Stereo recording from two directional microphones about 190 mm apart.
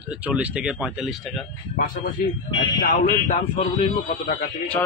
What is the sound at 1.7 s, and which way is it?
Speech, 50° left (ahead or behind).